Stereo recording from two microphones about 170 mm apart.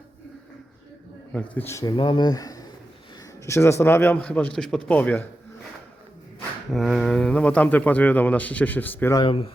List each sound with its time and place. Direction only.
1.3 s speech: 10° left (ahead or behind)
6.7 s speech: centre (ahead or behind)
9.2 s speech: 35° left (ahead or behind)